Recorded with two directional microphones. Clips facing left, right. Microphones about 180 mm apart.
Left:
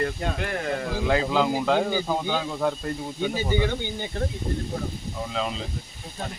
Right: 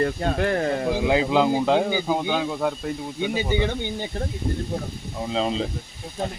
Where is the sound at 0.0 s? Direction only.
40° right (ahead or behind).